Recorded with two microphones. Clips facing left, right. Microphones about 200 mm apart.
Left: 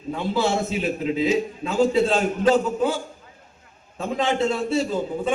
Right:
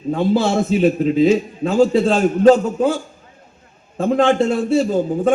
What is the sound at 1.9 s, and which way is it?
Speech, 45° right (ahead or behind).